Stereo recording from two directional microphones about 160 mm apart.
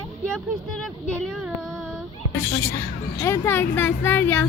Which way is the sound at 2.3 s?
20° left (ahead or behind).